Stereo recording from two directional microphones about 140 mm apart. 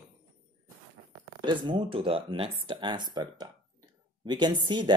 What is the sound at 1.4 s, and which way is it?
Speech, 35° right (ahead or behind).